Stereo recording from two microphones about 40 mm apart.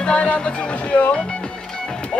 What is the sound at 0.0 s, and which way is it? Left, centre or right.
Speech, left.